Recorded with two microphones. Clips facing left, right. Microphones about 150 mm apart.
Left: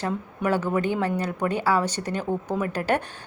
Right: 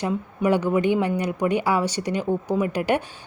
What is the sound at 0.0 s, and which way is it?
A woman's voice, 15° right (ahead or behind).